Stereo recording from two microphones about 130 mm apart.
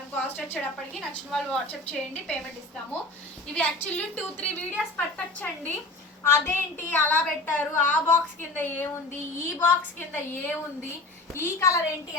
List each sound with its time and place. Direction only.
0.6 s a woman's voice: 5° left (ahead or behind)
3.6 s a woman's voice: 10° left (ahead or behind)